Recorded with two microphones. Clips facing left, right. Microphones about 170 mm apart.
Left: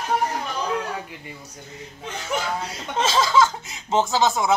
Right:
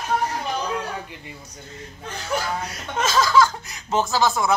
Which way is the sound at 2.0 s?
20° left (ahead or behind).